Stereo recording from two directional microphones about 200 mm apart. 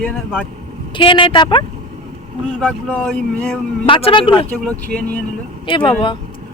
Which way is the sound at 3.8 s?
25° left (ahead or behind).